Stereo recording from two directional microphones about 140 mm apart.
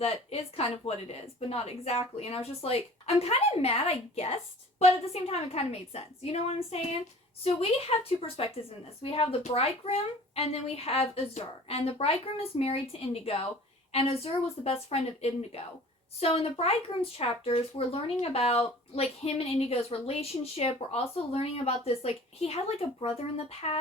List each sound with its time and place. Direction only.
0.0 s speech: 45° left (ahead or behind)